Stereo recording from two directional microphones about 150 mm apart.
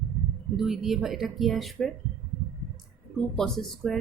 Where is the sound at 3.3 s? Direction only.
5° left (ahead or behind).